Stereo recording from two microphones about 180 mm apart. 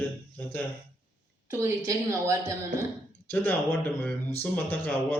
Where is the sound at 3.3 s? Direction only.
10° left (ahead or behind).